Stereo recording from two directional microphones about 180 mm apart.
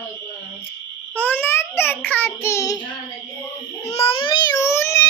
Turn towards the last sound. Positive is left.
turn(degrees=15)  # may be behind; listen again after turning